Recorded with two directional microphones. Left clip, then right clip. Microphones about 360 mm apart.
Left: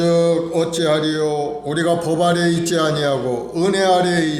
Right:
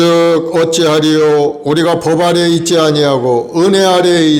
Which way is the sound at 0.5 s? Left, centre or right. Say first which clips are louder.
Right 7 dB; right.